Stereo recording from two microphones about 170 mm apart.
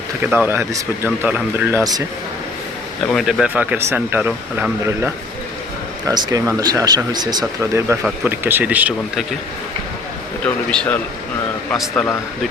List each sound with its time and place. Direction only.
0.2 s speech: 10° right (ahead or behind)
3.1 s speech: centre (ahead or behind)
6.1 s speech: 20° right (ahead or behind)
10.4 s a man's voice: 5° left (ahead or behind)